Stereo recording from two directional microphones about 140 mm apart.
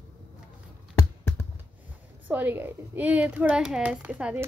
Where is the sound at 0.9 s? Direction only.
15° left (ahead or behind).